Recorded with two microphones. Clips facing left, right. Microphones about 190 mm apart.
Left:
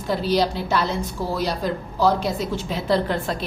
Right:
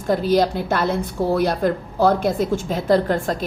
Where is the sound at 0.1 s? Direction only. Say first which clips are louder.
Right 4 dB; 50° right (ahead or behind).